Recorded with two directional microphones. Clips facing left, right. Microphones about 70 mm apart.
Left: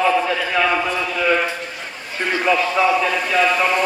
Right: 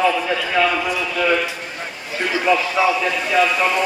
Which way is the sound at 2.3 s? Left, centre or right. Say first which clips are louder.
Even; centre.